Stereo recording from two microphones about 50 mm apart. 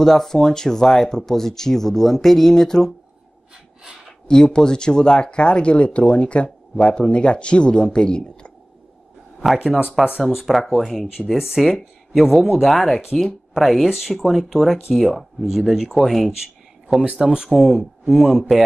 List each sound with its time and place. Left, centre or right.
0.0 s speech: centre
4.3 s speech: centre
10.0 s speech: centre
11.1 s speech: centre
17.0 s speech: centre
17.5 s speech: centre